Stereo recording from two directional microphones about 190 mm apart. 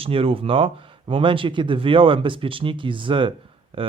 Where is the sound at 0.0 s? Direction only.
30° right (ahead or behind).